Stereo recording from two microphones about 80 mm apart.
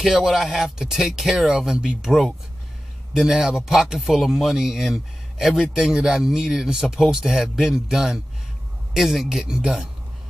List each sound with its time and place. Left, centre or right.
0.0 s a man's voice: centre